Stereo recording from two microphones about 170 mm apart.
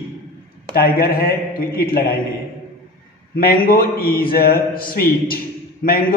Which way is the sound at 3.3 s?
60° left (ahead or behind).